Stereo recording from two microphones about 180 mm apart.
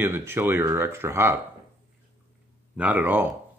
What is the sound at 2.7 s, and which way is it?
Speech, 10° right (ahead or behind).